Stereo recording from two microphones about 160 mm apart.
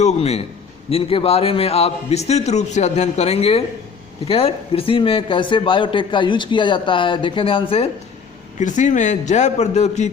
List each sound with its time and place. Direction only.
0.0 s a man's voice: 45° left (ahead or behind)
8.5 s a man's voice: 50° left (ahead or behind)